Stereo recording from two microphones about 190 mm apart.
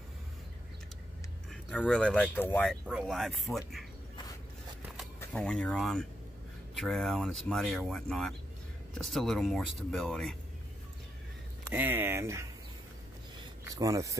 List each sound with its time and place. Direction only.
1.5 s speech: 5° left (ahead or behind)
4.9 s speech: 5° left (ahead or behind)
11.7 s speech: 10° right (ahead or behind)
13.7 s speech: 15° right (ahead or behind)